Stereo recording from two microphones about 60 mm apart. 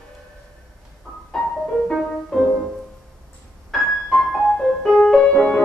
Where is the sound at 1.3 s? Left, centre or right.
Centre.